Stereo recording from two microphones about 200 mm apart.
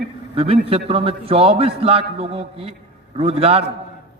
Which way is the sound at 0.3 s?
30° right (ahead or behind).